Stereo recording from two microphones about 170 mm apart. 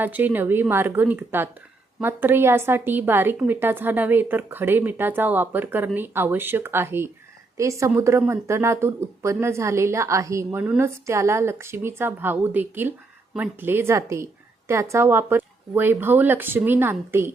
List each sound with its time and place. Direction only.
0.0 s speech: 10° right (ahead or behind)